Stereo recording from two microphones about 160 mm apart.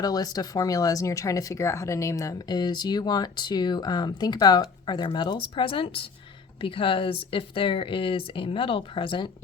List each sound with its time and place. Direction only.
0.0 s speech: 25° left (ahead or behind)